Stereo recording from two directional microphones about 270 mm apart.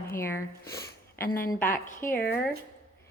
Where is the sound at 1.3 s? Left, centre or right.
Left.